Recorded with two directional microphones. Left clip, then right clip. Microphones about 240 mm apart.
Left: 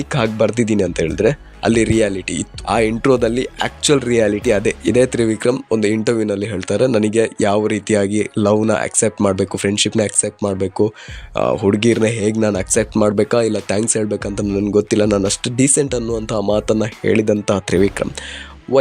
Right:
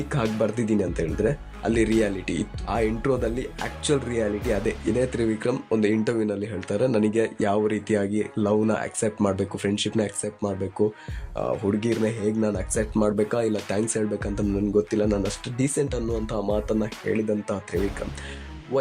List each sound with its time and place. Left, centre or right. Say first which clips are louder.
0.3 s speech: left 8 dB; left